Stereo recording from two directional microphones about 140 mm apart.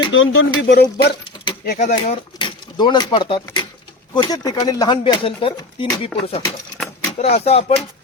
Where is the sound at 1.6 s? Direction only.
65° left (ahead or behind).